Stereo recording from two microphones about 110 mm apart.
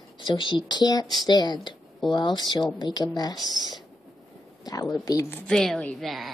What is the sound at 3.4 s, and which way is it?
Speech, 40° right (ahead or behind).